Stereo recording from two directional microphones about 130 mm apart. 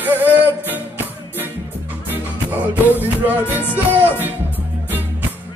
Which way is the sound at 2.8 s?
15° right (ahead or behind).